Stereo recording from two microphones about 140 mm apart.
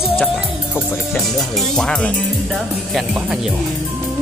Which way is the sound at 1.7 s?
5° left (ahead or behind).